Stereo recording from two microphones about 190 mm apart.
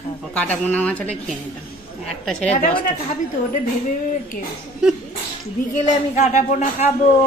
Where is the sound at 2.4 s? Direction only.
40° left (ahead or behind).